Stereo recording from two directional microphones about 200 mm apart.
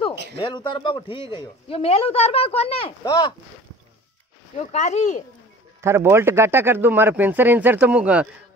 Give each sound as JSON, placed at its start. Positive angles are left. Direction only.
{"t": 0.4, "sound": "a man's voice", "side_deg": 25}
{"t": 3.0, "sound": "speech", "side_deg": 15}
{"t": 4.6, "sound": "speech", "side_deg": 35}
{"t": 5.8, "sound": "speech", "side_deg": -15}